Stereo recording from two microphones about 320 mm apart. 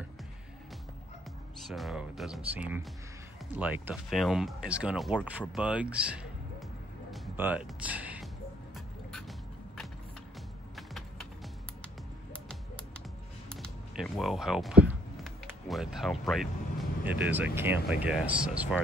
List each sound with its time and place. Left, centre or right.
1.7 s speech: centre
7.1 s music: centre
10.8 s a sound: centre
11.8 s typing: centre
13.5 s speech: centre